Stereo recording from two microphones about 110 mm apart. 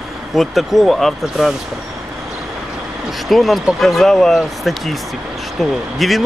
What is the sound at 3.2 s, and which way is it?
Speech, centre (ahead or behind).